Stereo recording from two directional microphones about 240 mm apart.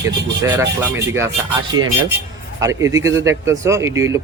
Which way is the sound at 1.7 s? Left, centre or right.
Right.